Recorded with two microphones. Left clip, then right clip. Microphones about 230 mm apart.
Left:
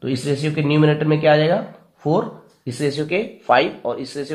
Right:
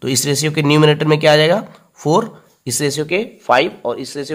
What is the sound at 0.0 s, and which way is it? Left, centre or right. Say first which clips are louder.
Speech: right 5 dB; right.